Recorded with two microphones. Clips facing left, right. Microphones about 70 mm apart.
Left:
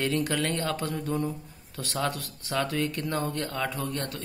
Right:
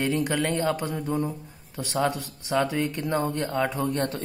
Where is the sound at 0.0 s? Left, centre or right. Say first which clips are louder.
Right 2 dB; centre.